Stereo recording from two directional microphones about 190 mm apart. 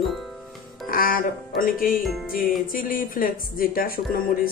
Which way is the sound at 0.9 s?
50° left (ahead or behind).